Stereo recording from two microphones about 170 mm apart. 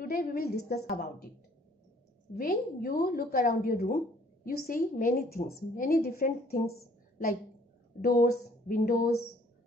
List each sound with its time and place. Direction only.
0.0 s a woman's voice: 60° left (ahead or behind)
2.3 s a woman's voice: 60° left (ahead or behind)